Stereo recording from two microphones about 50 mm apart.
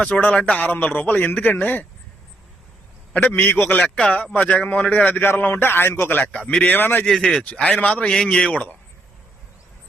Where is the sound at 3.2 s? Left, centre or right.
Left.